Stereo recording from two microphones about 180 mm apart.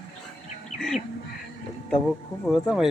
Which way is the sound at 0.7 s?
40° left (ahead or behind).